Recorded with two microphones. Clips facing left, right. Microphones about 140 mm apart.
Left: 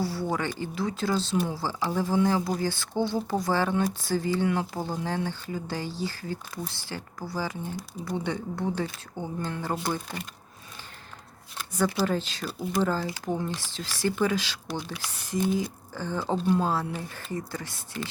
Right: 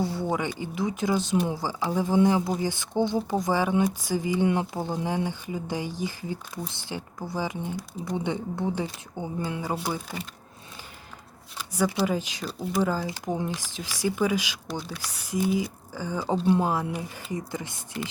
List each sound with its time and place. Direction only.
0.0 s speech: 20° right (ahead or behind)
11.5 s speech: 10° right (ahead or behind)
12.5 s speech: centre (ahead or behind)
12.8 s speech: 10° right (ahead or behind)